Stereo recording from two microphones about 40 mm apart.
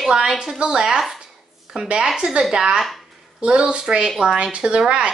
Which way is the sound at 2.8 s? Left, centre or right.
Centre.